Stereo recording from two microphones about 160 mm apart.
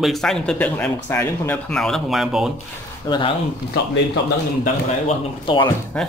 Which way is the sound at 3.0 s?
30° left (ahead or behind).